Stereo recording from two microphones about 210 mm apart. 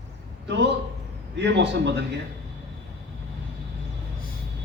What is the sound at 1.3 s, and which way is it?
Speech, 55° right (ahead or behind).